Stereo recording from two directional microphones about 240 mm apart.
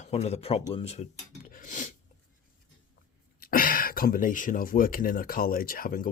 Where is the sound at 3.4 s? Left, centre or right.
Left.